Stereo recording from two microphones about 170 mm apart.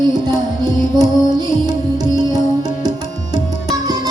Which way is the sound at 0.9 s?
25° right (ahead or behind).